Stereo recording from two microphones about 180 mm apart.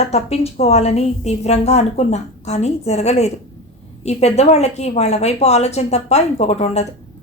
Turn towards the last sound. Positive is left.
turn(degrees=35)  # may be behind; listen again after turning